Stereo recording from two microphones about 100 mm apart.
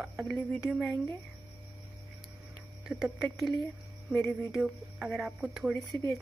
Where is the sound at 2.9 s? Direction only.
10° right (ahead or behind).